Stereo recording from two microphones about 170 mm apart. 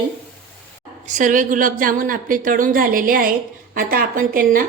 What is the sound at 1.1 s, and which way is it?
A woman's voice, 50° right (ahead or behind).